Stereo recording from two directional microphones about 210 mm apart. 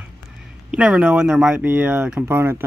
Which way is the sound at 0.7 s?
5° right (ahead or behind).